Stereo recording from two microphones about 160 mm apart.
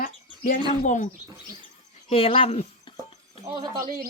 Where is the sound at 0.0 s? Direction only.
60° left (ahead or behind).